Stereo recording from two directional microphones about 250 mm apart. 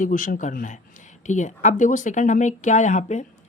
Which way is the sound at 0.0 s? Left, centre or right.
Left.